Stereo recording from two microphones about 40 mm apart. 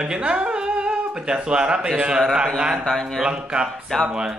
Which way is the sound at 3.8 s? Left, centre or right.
Centre.